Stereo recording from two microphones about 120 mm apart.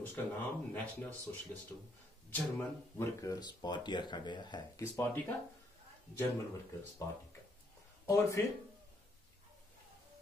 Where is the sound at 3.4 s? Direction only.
40° left (ahead or behind).